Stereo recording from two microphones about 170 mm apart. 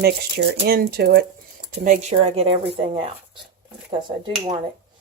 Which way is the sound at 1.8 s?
45° right (ahead or behind).